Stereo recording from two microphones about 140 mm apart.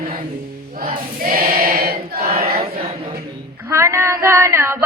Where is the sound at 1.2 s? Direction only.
90° right.